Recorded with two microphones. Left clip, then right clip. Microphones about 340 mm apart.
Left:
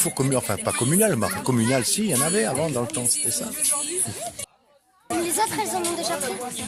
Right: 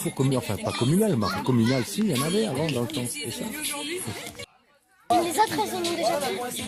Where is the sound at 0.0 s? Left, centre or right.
Left.